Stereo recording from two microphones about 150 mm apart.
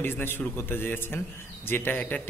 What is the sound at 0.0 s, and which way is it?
Speech, 15° left (ahead or behind).